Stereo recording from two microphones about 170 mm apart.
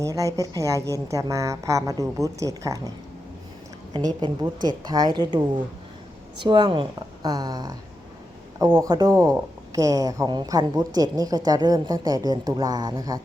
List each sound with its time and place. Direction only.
0.0 s speech: 20° right (ahead or behind)
3.9 s speech: 25° right (ahead or behind)